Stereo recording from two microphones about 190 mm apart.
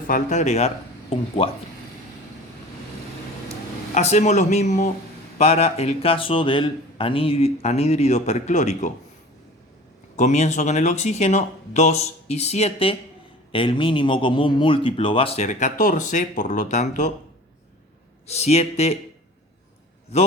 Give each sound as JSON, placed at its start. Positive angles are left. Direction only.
{"t": 0.1, "sound": "a man's voice", "side_deg": 40}
{"t": 3.9, "sound": "speech", "side_deg": 35}
{"t": 10.2, "sound": "a man's voice", "side_deg": 35}
{"t": 18.3, "sound": "speech", "side_deg": 35}